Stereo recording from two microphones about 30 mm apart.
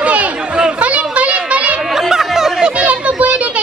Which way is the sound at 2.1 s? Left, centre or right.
Centre.